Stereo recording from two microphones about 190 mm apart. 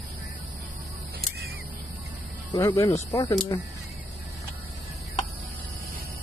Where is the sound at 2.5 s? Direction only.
15° left (ahead or behind).